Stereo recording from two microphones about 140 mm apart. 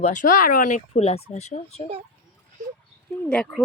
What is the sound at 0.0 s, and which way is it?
Speech, 65° left (ahead or behind).